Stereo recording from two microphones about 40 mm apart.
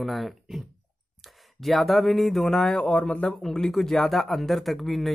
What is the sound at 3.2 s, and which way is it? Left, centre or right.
Speech, centre.